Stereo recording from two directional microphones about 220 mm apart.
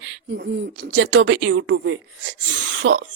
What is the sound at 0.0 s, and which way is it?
Speech, 60° right (ahead or behind).